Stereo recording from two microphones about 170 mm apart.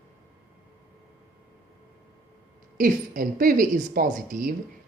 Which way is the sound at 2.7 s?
55° right (ahead or behind).